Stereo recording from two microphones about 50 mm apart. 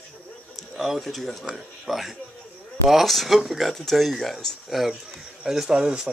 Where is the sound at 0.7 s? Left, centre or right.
Centre.